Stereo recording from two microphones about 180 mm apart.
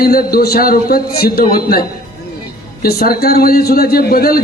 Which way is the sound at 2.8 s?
60° left (ahead or behind).